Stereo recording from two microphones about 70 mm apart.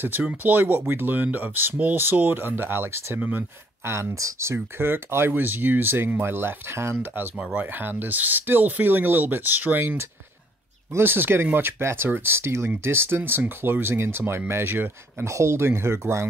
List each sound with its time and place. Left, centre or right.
0.2 s speech: centre
0.5 s speech: right
3.2 s speech: right
3.8 s speech: right
4.7 s speech: right
15.2 s speech: right